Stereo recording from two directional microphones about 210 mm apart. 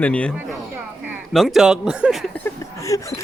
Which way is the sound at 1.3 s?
Centre (ahead or behind).